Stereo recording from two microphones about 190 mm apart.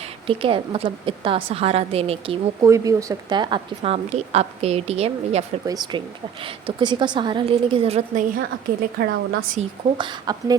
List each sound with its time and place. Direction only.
0.3 s a woman's voice: 30° right (ahead or behind)
2.6 s a woman's voice: 15° right (ahead or behind); by 5.5 s 35° right (ahead or behind)
5.6 s a woman's voice: 20° right (ahead or behind); by 8.3 s 40° right (ahead or behind)
9.0 s a woman's voice: 50° right (ahead or behind)
9.6 s a woman's voice: 25° right (ahead or behind)